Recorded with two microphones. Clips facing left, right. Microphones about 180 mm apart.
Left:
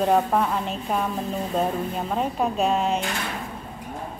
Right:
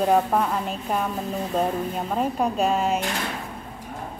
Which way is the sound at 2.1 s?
Centre (ahead or behind).